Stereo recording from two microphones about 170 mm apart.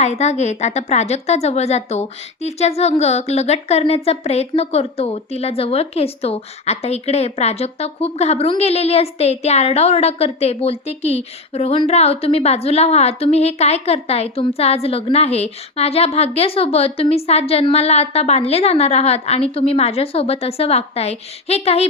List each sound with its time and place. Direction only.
0.0 s a woman's voice: 40° left (ahead or behind)